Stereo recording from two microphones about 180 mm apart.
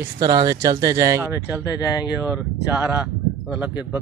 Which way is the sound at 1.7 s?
20° left (ahead or behind).